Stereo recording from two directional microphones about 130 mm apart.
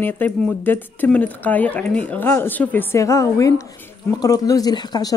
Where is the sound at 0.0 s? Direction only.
15° left (ahead or behind).